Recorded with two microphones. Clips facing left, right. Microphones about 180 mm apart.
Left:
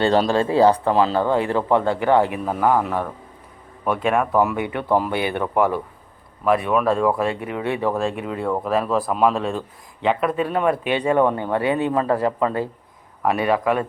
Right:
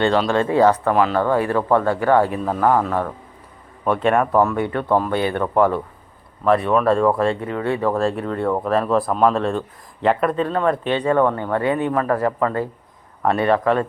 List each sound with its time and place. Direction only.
0.0 s speech: 35° left (ahead or behind); by 7.3 s 5° left (ahead or behind)
7.4 s speech: 20° left (ahead or behind)
8.2 s speech: 5° left (ahead or behind)